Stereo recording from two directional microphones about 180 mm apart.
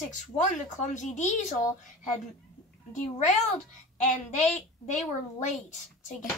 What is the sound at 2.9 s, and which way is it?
Speech, 40° left (ahead or behind).